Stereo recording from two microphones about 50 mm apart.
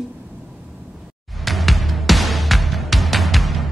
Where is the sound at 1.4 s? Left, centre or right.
Centre.